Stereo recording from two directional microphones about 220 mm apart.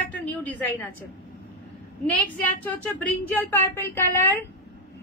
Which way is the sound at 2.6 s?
5° left (ahead or behind).